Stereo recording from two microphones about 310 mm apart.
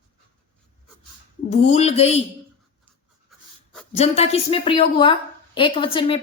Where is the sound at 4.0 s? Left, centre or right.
Centre.